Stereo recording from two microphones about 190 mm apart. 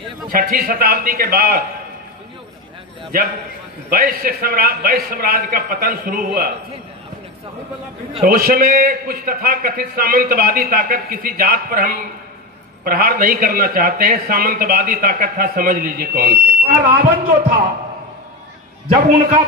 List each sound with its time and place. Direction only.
0.3 s a man's voice: 50° right (ahead or behind)
3.9 s a man's voice: 50° right (ahead or behind)
8.2 s a man's voice: 50° right (ahead or behind)